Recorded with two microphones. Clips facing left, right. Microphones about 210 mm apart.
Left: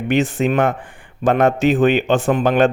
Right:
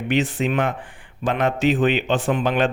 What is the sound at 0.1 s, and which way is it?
A man's voice, 45° left (ahead or behind).